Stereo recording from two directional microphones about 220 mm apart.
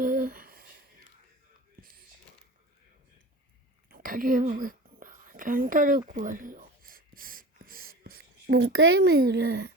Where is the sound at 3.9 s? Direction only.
40° right (ahead or behind).